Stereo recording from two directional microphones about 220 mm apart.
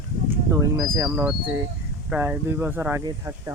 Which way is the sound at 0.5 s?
15° right (ahead or behind).